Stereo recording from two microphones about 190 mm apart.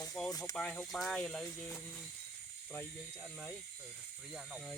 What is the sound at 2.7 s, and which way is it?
Speech, 5° left (ahead or behind).